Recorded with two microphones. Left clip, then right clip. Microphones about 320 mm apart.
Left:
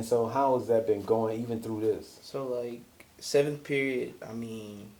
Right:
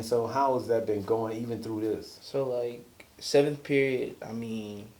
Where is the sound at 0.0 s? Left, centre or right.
Left.